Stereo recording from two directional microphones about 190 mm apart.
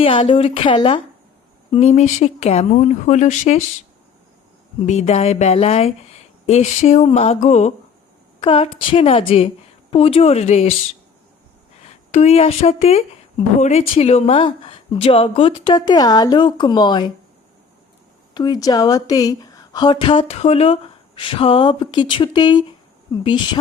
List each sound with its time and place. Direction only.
0.0 s a woman's voice: 30° left (ahead or behind)
4.9 s a woman's voice: 35° left (ahead or behind)
12.1 s speech: 35° left (ahead or behind)
18.3 s speech: 20° left (ahead or behind)